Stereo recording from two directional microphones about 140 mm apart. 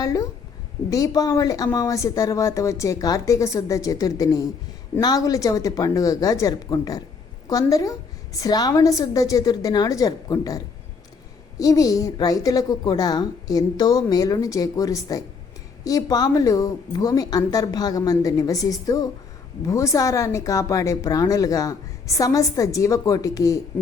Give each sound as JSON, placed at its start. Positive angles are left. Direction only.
{"t": 0.0, "sound": "speech", "side_deg": 25}
{"t": 11.6, "sound": "speech", "side_deg": 25}